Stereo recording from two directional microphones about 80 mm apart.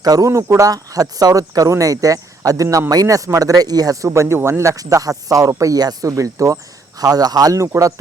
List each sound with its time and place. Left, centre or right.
0.0 s speech: right
0.7 s speech: right
4.1 s speech: right
7.0 s speech: right